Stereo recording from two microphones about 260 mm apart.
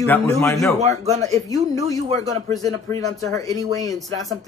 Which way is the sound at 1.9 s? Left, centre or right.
Right.